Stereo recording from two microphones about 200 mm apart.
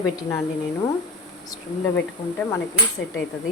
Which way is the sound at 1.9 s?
5° left (ahead or behind).